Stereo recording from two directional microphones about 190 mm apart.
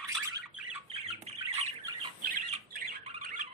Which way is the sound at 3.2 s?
45° right (ahead or behind).